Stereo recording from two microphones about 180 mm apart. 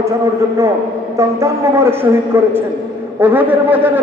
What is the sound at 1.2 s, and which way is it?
A man's voice, 15° right (ahead or behind).